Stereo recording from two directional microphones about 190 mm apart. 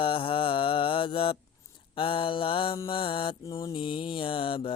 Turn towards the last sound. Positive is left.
turn(degrees=30)  # may be behind; listen again after turning